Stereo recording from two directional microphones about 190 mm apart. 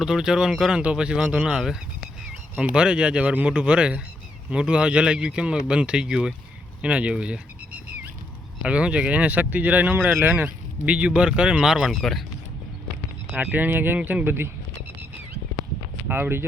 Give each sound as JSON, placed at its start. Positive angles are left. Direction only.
{"t": 0.0, "sound": "speech", "side_deg": -5}
{"t": 6.8, "sound": "a sound", "side_deg": -5}
{"t": 8.6, "sound": "speech", "side_deg": -5}
{"t": 13.3, "sound": "speech", "side_deg": -10}
{"t": 16.0, "sound": "speech", "side_deg": -10}